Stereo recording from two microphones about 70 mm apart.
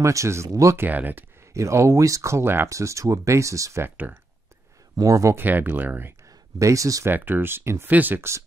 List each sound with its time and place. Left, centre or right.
0.0 s speech: right
0.7 s speech: right
1.5 s speech: right
2.7 s speech: right
3.8 s speech: right
4.9 s speech: right
5.3 s speech: right
6.6 s speech: right
7.1 s speech: right
7.9 s speech: right
8.2 s speech: right